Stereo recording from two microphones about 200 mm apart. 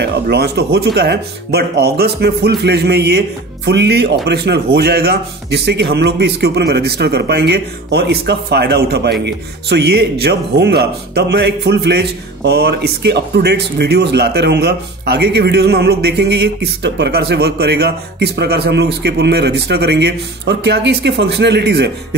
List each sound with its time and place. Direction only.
0.0 s speech: 55° right (ahead or behind)